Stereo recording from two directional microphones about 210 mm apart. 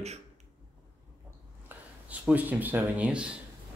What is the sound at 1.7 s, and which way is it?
Speech, 5° right (ahead or behind).